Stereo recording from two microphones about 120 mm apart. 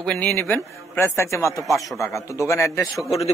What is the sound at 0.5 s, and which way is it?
A man's voice, 20° left (ahead or behind).